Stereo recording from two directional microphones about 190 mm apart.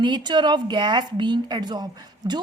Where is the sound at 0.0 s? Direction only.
25° right (ahead or behind).